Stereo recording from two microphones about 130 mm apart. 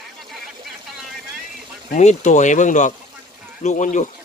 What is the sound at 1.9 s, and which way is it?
Speech, 65° left (ahead or behind).